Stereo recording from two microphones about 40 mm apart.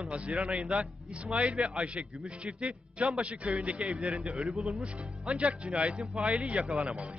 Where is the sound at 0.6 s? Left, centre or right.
Centre.